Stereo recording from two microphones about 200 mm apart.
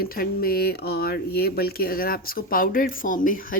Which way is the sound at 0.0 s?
50° left (ahead or behind).